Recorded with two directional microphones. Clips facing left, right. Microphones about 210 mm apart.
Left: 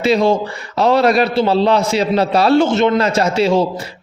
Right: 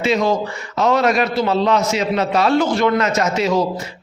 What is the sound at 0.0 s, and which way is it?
A man's voice, 35° left (ahead or behind).